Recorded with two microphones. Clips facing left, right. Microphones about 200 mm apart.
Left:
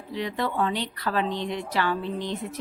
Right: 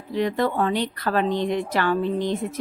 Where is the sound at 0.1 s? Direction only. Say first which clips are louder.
Right 6 dB; 50° right (ahead or behind).